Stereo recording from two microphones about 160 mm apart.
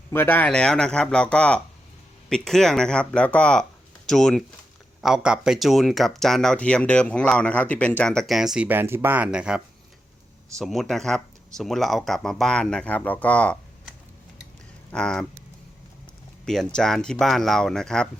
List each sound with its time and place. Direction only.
0.1 s speech: 15° left (ahead or behind); by 9.6 s 5° right (ahead or behind)
10.6 s speech: centre (ahead or behind)
14.9 s speech: 5° left (ahead or behind)
16.5 s speech: 5° left (ahead or behind)